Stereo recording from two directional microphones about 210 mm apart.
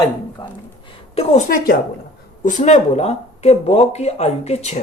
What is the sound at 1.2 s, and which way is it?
Speech, 30° left (ahead or behind).